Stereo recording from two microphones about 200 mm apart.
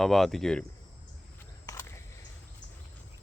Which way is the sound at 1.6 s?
15° left (ahead or behind).